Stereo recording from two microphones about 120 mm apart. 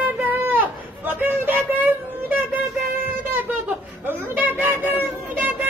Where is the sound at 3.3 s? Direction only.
15° right (ahead or behind).